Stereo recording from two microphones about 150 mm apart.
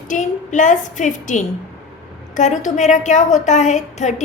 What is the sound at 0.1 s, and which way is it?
A woman's voice, 55° left (ahead or behind).